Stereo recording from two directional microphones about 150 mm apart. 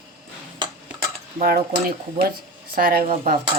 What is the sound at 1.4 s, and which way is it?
Speech, 80° right.